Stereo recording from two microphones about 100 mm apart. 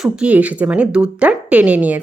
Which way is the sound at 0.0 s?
10° right (ahead or behind).